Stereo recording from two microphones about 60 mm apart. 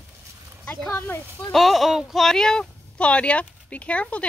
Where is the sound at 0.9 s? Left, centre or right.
Left.